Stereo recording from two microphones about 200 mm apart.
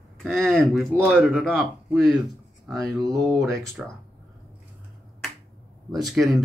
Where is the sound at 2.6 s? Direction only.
15° right (ahead or behind).